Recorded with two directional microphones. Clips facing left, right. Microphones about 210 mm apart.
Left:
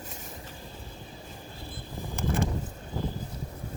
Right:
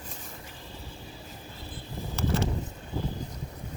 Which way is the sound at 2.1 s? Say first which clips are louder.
Right 1 dB; 50° left (ahead or behind).